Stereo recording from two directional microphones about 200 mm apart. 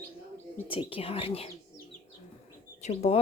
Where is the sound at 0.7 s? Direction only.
25° left (ahead or behind).